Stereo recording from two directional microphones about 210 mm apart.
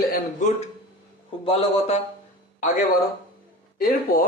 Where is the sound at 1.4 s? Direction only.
25° left (ahead or behind).